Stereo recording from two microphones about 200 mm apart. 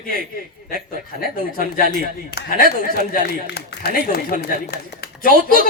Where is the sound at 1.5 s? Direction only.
45° left (ahead or behind).